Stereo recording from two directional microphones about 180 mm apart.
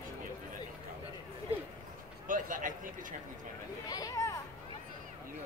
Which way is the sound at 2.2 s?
50° right (ahead or behind).